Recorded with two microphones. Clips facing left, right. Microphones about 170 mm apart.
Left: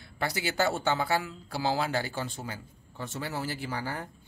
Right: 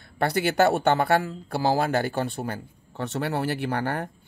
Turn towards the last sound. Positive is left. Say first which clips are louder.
# right 8 dB
turn(degrees=-65)  # may be behind; listen again after turning